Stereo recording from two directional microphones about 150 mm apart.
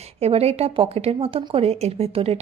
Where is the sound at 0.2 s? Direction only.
45° right (ahead or behind).